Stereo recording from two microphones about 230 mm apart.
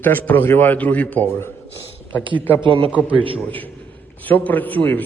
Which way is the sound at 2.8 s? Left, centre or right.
Centre.